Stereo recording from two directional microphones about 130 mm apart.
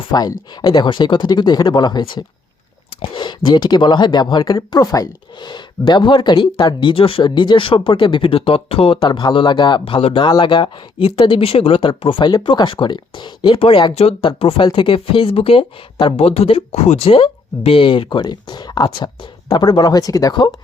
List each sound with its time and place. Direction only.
0.1 s speech: 30° left (ahead or behind); by 10.2 s 50° left (ahead or behind)
10.2 s speech: 35° left (ahead or behind)
13.9 s speech: 50° left (ahead or behind); by 20.5 s 30° left (ahead or behind)